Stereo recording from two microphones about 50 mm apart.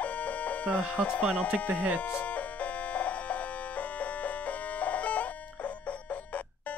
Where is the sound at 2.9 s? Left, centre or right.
Left.